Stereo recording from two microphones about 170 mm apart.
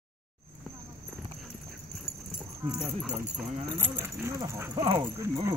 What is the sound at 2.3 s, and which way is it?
Dog, 5° right (ahead or behind).